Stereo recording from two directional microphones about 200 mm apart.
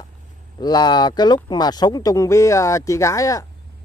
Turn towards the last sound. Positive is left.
turn(degrees=15)  # may be behind; listen again after turning